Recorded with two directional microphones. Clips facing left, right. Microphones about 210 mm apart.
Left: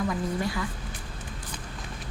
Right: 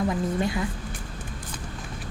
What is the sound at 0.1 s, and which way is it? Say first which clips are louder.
Speech: right 3 dB; 20° right (ahead or behind).